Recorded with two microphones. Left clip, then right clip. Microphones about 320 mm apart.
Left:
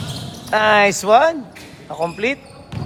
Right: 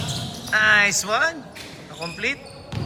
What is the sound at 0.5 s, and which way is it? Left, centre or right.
Speech, centre.